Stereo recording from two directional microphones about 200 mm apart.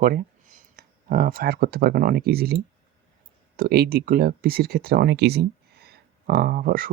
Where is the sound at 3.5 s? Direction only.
50° right (ahead or behind).